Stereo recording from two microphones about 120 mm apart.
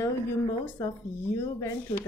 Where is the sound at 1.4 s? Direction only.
20° left (ahead or behind).